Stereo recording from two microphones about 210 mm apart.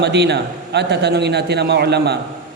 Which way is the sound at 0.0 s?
50° right (ahead or behind).